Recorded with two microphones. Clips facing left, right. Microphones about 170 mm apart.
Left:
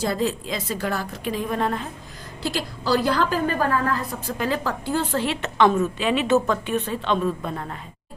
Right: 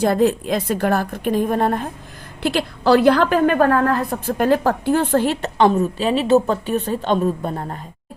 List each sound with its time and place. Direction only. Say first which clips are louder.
0.0 s a woman's voice: right 8 dB; 60° right (ahead or behind)
2.4 s a woman's voice: right 7 dB; 60° right (ahead or behind); by 7.8 s 35° right (ahead or behind)